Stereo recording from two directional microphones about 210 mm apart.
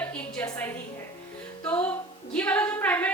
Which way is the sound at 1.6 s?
5° left (ahead or behind).